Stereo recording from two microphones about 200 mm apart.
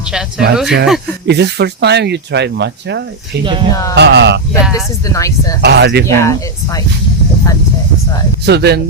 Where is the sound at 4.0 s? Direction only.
60° right (ahead or behind).